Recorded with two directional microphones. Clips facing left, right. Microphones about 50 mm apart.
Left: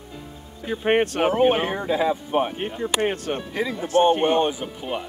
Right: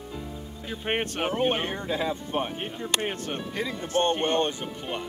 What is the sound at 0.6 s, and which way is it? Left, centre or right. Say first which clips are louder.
Speech: left 9 dB; centre.